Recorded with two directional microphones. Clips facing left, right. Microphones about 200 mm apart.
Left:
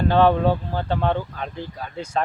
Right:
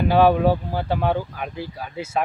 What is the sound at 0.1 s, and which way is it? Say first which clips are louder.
Speech: right 2 dB; 10° right (ahead or behind).